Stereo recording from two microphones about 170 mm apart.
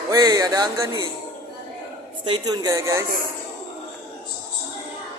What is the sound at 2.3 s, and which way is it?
Speech, 25° right (ahead or behind).